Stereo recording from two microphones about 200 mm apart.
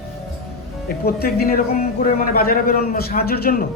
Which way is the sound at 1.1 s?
50° left (ahead or behind).